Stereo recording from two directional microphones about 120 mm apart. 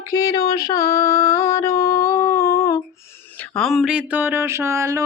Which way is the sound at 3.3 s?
10° left (ahead or behind).